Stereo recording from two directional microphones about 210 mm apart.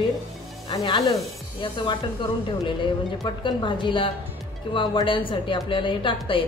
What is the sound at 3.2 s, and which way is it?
A man's voice, 20° left (ahead or behind).